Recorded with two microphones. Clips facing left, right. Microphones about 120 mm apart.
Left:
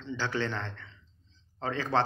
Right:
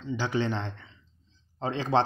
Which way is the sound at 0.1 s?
15° right (ahead or behind).